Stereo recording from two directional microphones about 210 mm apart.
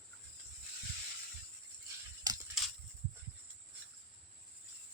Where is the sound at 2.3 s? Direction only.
20° right (ahead or behind).